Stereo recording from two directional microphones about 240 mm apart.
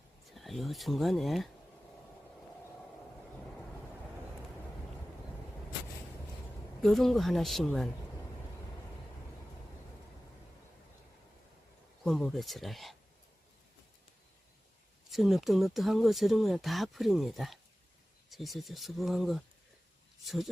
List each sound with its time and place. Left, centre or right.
0.3 s speech: centre
6.8 s speech: centre
12.0 s speech: centre
15.1 s speech: centre